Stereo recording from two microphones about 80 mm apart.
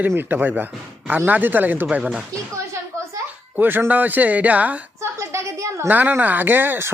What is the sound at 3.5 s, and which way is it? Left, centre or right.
Speech, right.